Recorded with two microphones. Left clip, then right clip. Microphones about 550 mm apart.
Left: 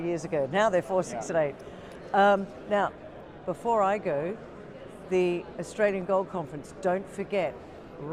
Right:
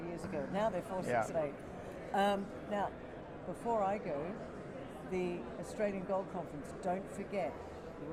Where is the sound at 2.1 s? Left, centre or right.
Left.